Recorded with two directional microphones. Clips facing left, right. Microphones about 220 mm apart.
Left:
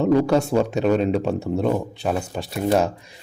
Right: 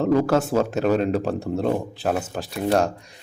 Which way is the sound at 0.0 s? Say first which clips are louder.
Left 1 dB; centre (ahead or behind).